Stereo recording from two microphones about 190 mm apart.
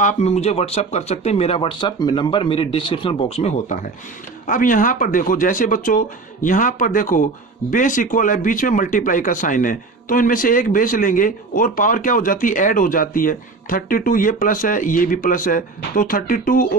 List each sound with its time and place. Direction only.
0.0 s speech: 35° left (ahead or behind)